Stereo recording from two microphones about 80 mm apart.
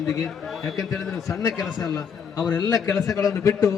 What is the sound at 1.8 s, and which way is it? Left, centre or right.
A man's voice, left.